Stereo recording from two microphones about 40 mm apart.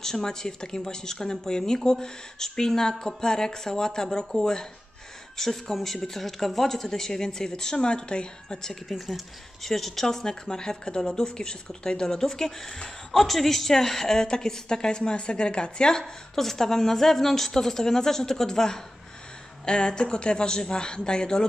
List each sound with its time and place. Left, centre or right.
0.0 s speech: centre
8.8 s a man's voice: centre
13.1 s speech: centre; by 16.0 s left
16.0 s a man's voice: centre